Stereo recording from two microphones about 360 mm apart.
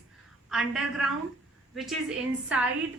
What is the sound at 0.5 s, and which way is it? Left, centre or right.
Speech, centre.